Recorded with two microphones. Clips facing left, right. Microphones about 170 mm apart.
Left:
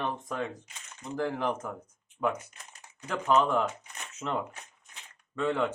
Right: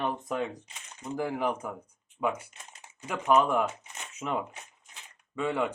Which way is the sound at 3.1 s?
10° right (ahead or behind).